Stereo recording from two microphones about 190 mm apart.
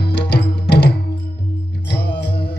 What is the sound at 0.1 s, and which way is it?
Music, 60° left (ahead or behind).